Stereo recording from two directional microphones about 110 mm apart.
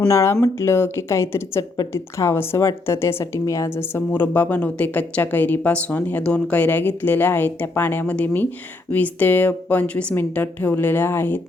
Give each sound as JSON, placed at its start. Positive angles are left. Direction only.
{"t": 0.1, "sound": "a woman's voice", "side_deg": 25}